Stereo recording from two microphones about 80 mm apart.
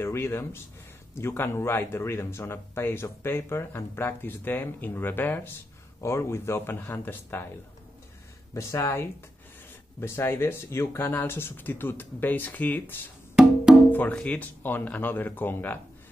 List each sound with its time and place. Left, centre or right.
0.0 s speech: left
6.0 s speech: left
8.5 s speech: left
13.7 s wood block: centre
14.1 s speech: centre